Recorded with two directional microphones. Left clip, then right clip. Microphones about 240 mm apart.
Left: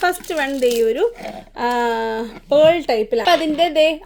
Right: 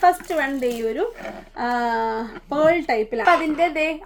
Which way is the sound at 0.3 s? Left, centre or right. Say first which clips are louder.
Left 4 dB; left.